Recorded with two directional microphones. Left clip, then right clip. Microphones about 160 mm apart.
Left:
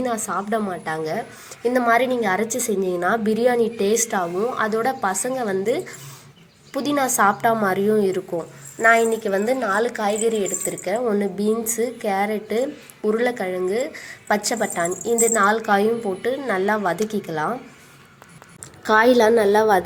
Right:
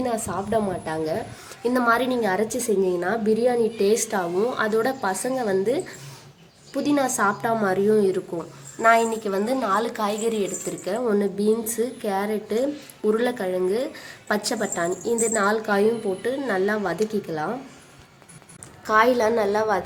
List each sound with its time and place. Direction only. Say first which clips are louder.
0.0 s a woman's voice: left 2 dB; 10° left (ahead or behind)
18.9 s a woman's voice: left 4 dB; 25° left (ahead or behind)